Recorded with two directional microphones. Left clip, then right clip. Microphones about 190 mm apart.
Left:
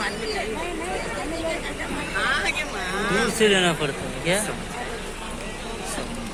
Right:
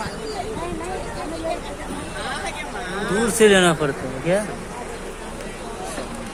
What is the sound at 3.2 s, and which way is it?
Speech, 55° right (ahead or behind).